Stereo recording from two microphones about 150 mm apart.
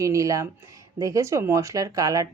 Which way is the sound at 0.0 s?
20° right (ahead or behind).